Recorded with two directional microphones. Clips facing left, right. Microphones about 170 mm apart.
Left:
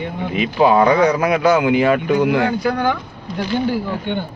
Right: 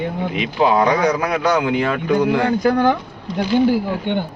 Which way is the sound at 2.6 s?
40° right (ahead or behind).